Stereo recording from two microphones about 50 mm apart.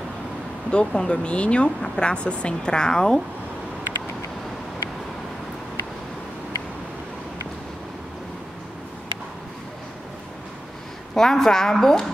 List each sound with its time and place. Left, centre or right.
0.7 s speech: left
11.1 s a woman's voice: centre